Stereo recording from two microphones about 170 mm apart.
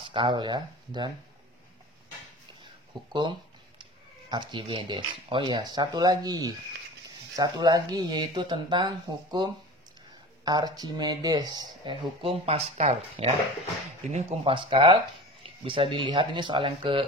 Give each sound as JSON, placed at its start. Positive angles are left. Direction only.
{"t": 0.0, "sound": "speech", "side_deg": -30}
{"t": 3.1, "sound": "a sound", "side_deg": -30}
{"t": 4.3, "sound": "speech", "side_deg": -25}